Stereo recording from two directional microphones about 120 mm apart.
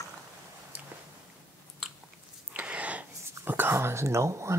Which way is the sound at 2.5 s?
10° right (ahead or behind).